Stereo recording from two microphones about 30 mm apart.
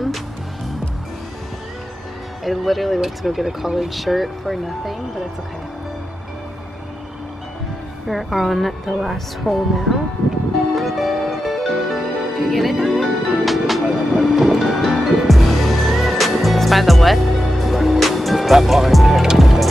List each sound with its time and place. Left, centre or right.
2.4 s speech: centre
8.1 s speech: centre
10.7 s music: centre